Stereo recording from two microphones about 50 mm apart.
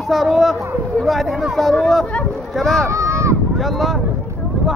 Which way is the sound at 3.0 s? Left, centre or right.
Right.